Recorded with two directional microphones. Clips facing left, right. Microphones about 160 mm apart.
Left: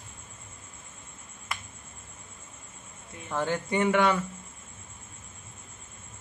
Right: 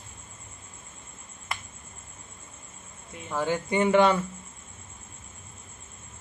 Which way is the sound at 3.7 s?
25° right (ahead or behind).